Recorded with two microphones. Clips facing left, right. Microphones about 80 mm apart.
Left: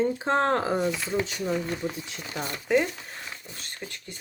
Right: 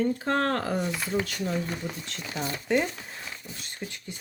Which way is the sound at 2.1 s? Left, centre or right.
Centre.